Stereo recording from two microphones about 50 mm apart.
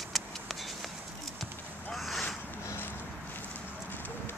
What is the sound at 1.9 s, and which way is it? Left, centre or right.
Boat, centre.